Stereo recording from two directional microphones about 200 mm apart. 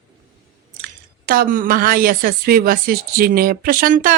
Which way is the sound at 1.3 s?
45° right (ahead or behind).